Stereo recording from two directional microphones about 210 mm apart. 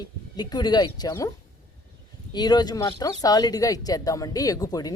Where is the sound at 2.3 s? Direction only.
20° left (ahead or behind).